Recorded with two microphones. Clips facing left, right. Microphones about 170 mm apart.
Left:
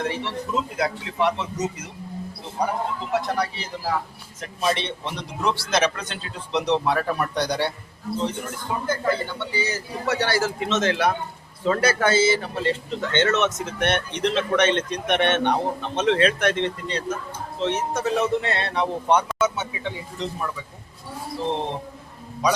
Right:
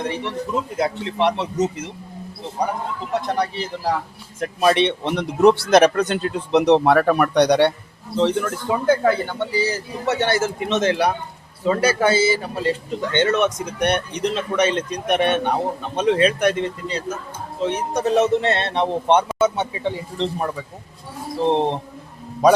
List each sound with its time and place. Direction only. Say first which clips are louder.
0.0 s a man's voice: right 2 dB; 15° right (ahead or behind)
1.2 s speech: right 4 dB; 30° right (ahead or behind)
3.1 s speech: right 3 dB; 20° right (ahead or behind)
4.4 s speech: right 8 dB; 65° right (ahead or behind)
8.1 s a man's voice: right 8 dB; 90° right; by 21.8 s 35° right (ahead or behind)